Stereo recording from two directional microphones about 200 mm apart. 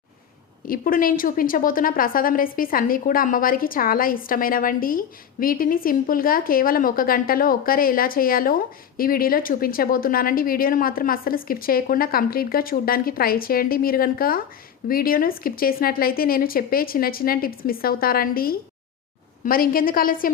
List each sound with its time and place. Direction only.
0.7 s a woman's voice: 45° left (ahead or behind)